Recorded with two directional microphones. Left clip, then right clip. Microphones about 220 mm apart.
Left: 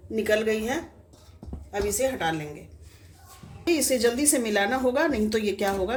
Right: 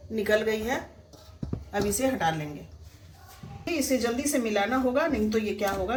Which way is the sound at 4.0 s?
40° left (ahead or behind).